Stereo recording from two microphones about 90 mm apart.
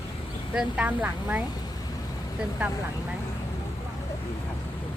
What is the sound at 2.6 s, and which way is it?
Speech, 15° right (ahead or behind).